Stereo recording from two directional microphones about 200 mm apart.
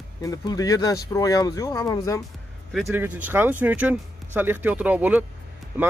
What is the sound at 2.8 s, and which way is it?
Speech, 10° right (ahead or behind).